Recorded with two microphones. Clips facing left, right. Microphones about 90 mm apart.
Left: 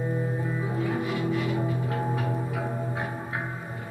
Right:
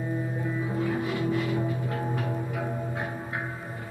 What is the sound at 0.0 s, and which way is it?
Music, 20° left (ahead or behind).